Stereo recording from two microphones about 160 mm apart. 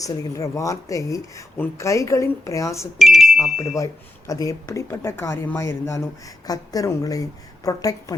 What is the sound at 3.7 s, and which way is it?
Speech, 20° left (ahead or behind).